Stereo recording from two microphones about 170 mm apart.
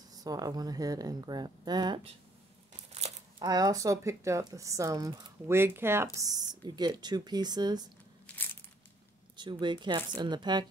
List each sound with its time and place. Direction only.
0.1 s speech: 20° right (ahead or behind)
2.7 s a sound: 40° right (ahead or behind)
3.4 s speech: 20° right (ahead or behind)
8.3 s crushing: 5° left (ahead or behind)
9.4 s speech: 25° right (ahead or behind)